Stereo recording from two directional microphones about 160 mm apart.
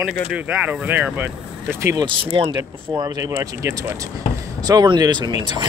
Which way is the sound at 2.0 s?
30° right (ahead or behind).